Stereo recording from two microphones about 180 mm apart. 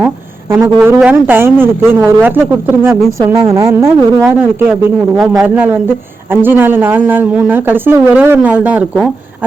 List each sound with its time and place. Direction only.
0.5 s speech: 15° right (ahead or behind)